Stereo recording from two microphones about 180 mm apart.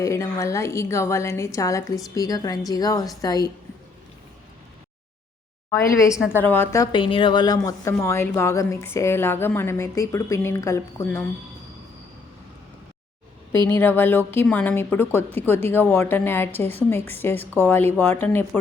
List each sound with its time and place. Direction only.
0.0 s a woman's voice: 15° left (ahead or behind)
5.7 s speech: 15° left (ahead or behind)
6.9 s speech: 30° left (ahead or behind)
13.7 s speech: 10° left (ahead or behind)